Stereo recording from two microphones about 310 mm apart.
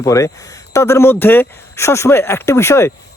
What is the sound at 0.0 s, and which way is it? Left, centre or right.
Speech, centre.